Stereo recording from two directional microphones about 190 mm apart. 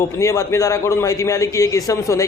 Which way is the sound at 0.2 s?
15° left (ahead or behind).